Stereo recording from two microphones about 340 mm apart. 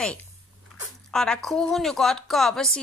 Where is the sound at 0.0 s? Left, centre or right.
Centre.